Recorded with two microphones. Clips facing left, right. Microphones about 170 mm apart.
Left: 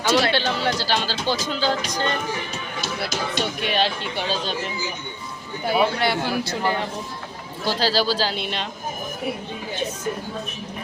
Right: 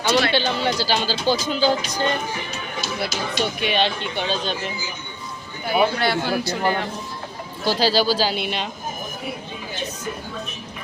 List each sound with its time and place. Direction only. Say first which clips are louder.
0.1 s speech: even; centre (ahead or behind)
3.4 s speech: right 3 dB; centre (ahead or behind)
5.6 s a man's voice: right 1 dB; 25° left (ahead or behind)
7.6 s speech: right 2 dB; centre (ahead or behind)